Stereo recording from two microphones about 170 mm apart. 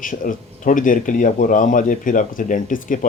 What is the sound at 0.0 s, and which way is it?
Speech, 50° left (ahead or behind).